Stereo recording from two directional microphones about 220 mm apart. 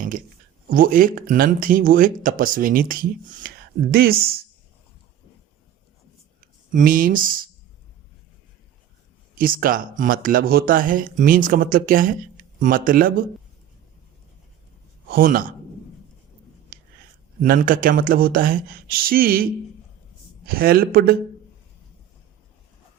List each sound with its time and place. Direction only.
0.7 s speech: 40° right (ahead or behind)
6.7 s speech: 40° right (ahead or behind)
9.3 s speech: 40° right (ahead or behind)
15.1 s speech: 40° right (ahead or behind)
16.7 s a sound: 40° right (ahead or behind)
17.4 s speech: 40° right (ahead or behind)
20.5 s speech: 40° right (ahead or behind)